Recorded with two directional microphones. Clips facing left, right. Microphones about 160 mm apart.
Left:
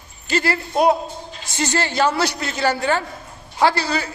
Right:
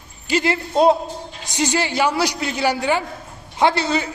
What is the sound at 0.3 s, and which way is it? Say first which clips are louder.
A man's voice: right 1 dB; 15° right (ahead or behind).